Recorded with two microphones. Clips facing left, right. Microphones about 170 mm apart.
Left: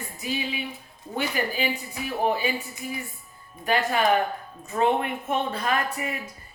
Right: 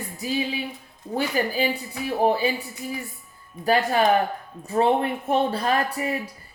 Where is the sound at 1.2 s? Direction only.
35° right (ahead or behind).